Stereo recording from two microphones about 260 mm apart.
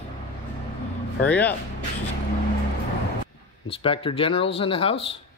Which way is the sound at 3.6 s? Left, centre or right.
Left.